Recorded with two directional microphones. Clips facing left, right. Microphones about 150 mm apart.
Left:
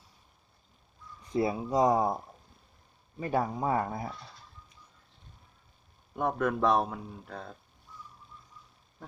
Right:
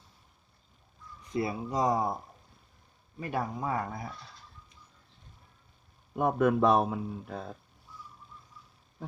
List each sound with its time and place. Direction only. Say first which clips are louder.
1.4 s speech: left 4 dB; 25° left (ahead or behind)
3.2 s speech: left 3 dB; 25° left (ahead or behind)
6.1 s speech: right 4 dB; 5° right (ahead or behind)